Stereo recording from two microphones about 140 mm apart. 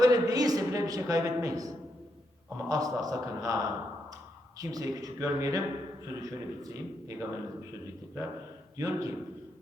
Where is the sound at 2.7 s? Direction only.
25° right (ahead or behind).